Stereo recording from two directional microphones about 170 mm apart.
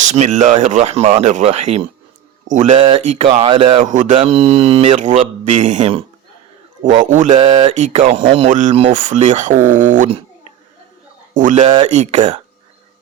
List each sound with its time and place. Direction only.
0.0 s speech: 45° right (ahead or behind)
2.7 s speech: 35° right (ahead or behind)
6.8 s speech: 50° right (ahead or behind)
11.3 s speech: 45° right (ahead or behind)